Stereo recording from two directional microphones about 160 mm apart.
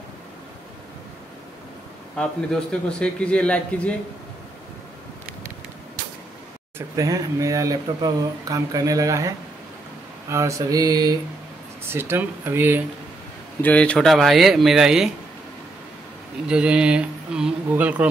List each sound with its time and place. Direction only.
2.1 s a man's voice: 5° left (ahead or behind)
7.0 s speech: 20° right (ahead or behind)
10.3 s speech: 20° right (ahead or behind)
11.8 s speech: 15° right (ahead or behind)
13.6 s speech: 10° left (ahead or behind)
16.4 s speech: 5° right (ahead or behind)